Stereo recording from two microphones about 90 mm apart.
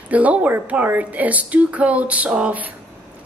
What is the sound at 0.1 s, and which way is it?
A woman's voice, 15° right (ahead or behind).